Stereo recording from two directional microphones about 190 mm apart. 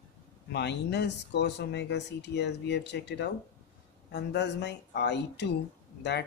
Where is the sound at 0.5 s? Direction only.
65° left (ahead or behind).